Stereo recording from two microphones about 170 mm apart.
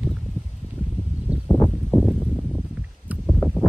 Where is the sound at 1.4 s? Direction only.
5° left (ahead or behind).